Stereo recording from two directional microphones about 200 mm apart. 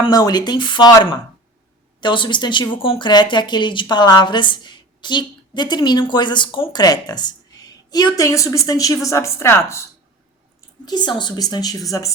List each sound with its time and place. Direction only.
0.0 s speech: 20° left (ahead or behind)
10.8 s speech: 20° left (ahead or behind)